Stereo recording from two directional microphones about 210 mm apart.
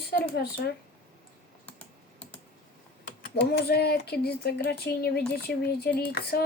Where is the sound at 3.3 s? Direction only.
50° left (ahead or behind).